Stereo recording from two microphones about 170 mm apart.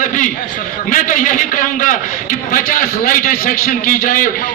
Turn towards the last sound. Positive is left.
turn(degrees=55)  # may be behind; listen again after turning